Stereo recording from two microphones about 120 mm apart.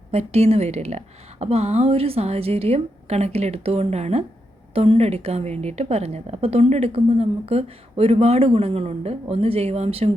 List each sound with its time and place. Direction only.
0.1 s a woman's voice: 60° right (ahead or behind)